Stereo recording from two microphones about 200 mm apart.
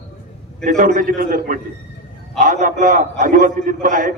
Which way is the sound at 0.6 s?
40° right (ahead or behind).